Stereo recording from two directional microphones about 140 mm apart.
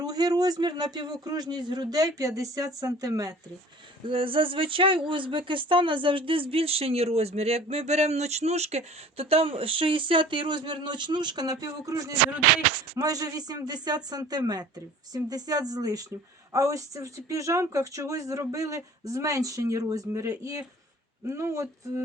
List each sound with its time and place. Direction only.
0.0 s speech: 25° right (ahead or behind)
4.0 s speech: 40° right (ahead or behind); by 22.0 s 20° right (ahead or behind)